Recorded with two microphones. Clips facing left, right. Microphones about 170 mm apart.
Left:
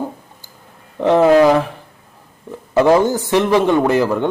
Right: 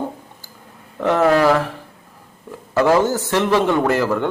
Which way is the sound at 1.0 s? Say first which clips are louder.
Left 4 dB; 20° left (ahead or behind).